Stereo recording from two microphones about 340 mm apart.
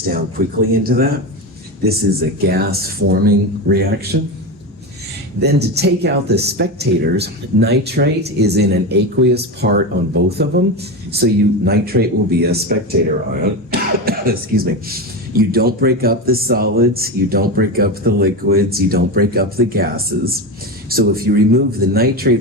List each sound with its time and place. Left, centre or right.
0.0 s speech: right
2.5 s speech: right
5.4 s speech: right